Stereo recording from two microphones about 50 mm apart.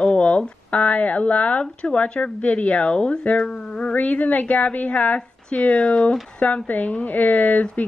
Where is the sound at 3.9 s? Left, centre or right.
Left.